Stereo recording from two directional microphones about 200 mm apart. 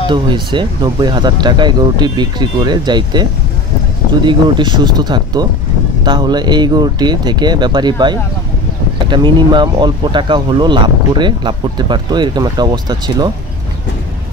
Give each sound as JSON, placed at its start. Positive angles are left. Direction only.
{"t": 0.1, "sound": "speech", "side_deg": -25}